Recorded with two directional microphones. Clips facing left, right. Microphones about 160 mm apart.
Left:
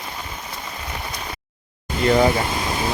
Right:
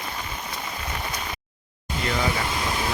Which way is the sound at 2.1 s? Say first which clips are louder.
Left 10 dB; 40° left (ahead or behind).